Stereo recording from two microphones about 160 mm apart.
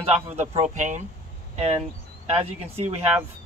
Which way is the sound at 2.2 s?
40° right (ahead or behind).